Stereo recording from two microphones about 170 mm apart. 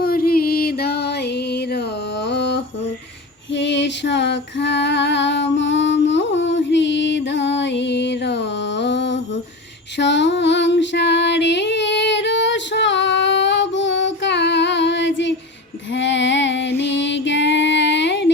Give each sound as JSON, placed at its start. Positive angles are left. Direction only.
{"t": 0.0, "sound": "music", "side_deg": 60}
{"t": 2.2, "sound": "a sound", "side_deg": 90}
{"t": 3.5, "sound": "female singing", "side_deg": 90}